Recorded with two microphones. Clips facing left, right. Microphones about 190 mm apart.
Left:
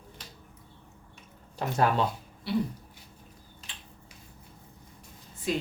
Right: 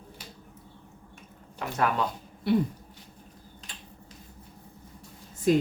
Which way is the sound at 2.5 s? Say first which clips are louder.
Right 5 dB; 50° right (ahead or behind).